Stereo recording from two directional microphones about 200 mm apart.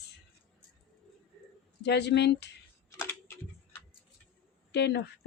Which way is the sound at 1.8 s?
55° left (ahead or behind).